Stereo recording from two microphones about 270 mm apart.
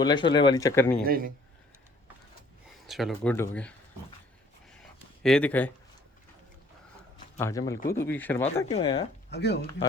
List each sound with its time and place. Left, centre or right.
0.0 s speech: centre
1.0 s a man's voice: right
2.8 s speech: centre
5.2 s speech: centre
7.3 s speech: centre
8.6 s speech: centre
9.3 s speech: left